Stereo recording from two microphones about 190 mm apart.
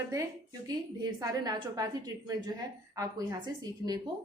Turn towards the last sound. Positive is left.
turn(degrees=-20)  # may be behind; listen again after turning